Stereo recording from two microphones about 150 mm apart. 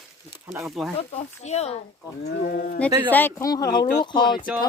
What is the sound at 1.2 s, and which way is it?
Speech, 45° left (ahead or behind).